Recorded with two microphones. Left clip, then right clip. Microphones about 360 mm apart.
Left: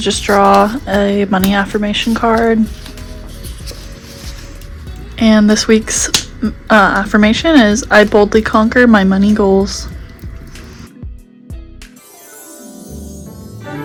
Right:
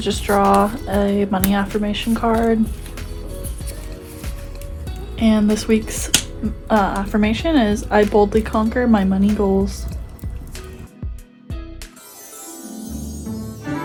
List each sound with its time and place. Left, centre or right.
0.0 s speech: left
5.1 s speech: left